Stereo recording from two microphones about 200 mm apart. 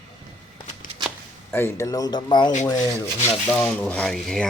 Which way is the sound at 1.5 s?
10° left (ahead or behind).